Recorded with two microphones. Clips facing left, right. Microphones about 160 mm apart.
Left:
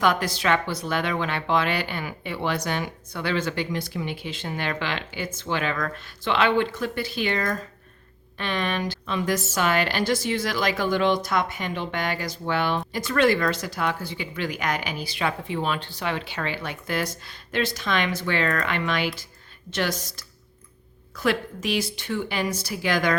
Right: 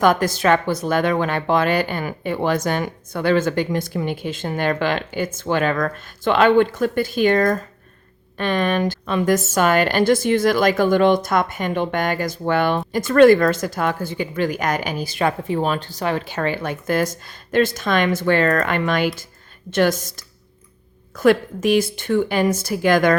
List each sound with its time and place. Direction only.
0.0 s a woman's voice: 45° right (ahead or behind)